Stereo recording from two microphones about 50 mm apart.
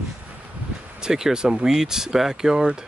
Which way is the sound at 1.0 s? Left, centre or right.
Centre.